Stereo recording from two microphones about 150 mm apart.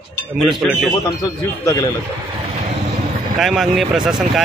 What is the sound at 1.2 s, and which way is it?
Speech, 25° left (ahead or behind).